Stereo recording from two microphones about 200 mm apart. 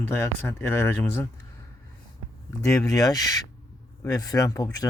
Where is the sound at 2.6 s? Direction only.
20° left (ahead or behind).